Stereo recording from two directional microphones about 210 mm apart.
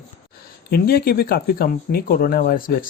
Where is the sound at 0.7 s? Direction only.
45° left (ahead or behind).